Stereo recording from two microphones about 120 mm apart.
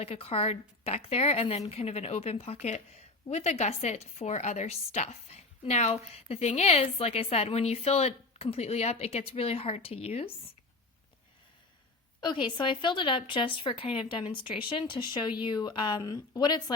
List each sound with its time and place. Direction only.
0.0 s a woman's voice: 55° left (ahead or behind)
12.2 s a woman's voice: 40° left (ahead or behind)